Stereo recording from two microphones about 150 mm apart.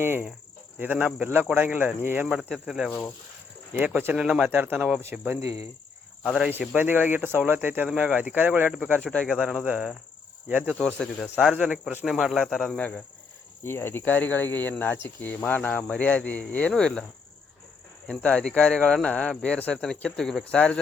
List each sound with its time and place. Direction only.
0.0 s speech: 15° right (ahead or behind)
5.4 s speech: 45° left (ahead or behind)
6.2 s speech: 5° left (ahead or behind)
6.6 s speech: 10° right (ahead or behind)
9.0 s speech: centre (ahead or behind)
18.1 s speech: 5° left (ahead or behind)